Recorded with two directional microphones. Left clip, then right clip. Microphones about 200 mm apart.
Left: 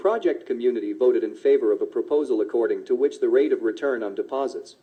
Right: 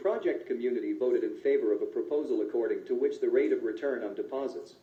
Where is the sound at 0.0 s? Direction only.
45° left (ahead or behind).